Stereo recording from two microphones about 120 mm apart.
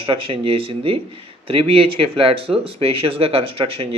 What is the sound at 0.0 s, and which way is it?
Speech, 50° right (ahead or behind).